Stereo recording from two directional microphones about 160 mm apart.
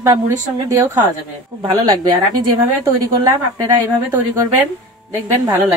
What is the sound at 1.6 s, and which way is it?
A woman's voice, 30° right (ahead or behind).